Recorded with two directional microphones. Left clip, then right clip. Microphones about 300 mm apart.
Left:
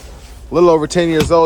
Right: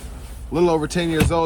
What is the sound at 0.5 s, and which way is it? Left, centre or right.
Speech, left.